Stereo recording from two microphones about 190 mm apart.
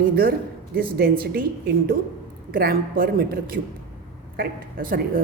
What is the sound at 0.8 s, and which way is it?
A woman's voice, 50° right (ahead or behind).